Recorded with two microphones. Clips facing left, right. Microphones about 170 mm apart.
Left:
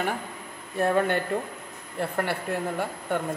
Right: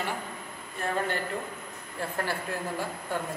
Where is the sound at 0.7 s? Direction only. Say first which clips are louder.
Left 7 dB; 60° left (ahead or behind).